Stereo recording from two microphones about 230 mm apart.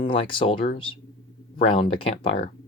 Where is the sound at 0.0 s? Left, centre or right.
Left.